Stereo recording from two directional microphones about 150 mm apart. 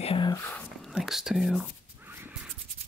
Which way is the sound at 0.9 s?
5° right (ahead or behind).